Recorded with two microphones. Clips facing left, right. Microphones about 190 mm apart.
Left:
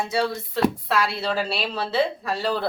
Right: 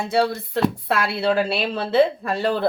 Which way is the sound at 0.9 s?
55° right (ahead or behind).